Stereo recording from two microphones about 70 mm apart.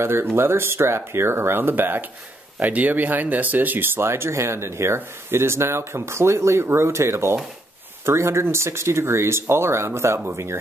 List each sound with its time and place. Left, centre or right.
0.0 s speech: right